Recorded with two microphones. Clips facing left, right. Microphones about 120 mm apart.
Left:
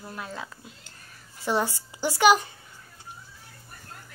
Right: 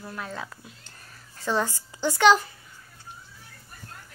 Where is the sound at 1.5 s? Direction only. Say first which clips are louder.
Even; 15° left (ahead or behind).